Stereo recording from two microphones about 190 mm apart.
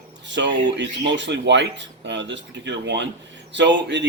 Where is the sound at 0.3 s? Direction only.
70° right (ahead or behind).